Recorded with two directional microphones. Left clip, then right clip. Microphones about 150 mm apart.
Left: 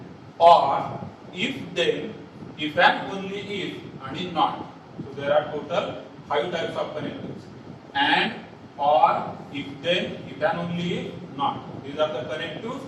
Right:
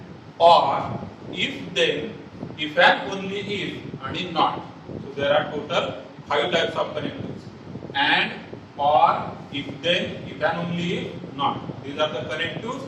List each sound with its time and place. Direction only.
0.6 s a man's voice: 30° right (ahead or behind)